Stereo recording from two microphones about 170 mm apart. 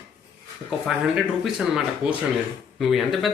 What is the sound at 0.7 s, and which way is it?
Speech, centre (ahead or behind).